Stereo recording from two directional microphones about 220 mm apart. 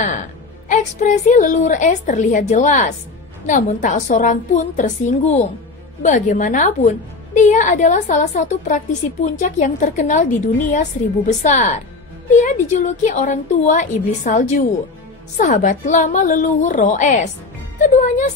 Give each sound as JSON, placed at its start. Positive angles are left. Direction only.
{"t": 0.7, "sound": "a woman's voice", "side_deg": 35}